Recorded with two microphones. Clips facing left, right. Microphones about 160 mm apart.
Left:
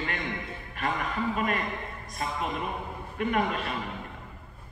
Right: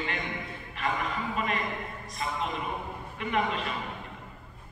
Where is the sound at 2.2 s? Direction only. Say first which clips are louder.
Left 1 dB; 50° left (ahead or behind).